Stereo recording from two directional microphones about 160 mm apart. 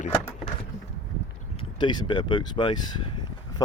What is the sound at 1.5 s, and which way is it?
Speech, 30° left (ahead or behind).